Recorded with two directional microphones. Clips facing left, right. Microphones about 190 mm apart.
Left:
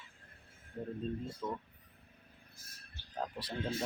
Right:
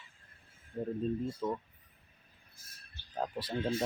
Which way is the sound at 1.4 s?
15° right (ahead or behind).